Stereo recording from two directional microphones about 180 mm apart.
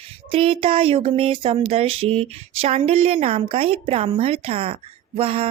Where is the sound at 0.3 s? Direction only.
30° right (ahead or behind).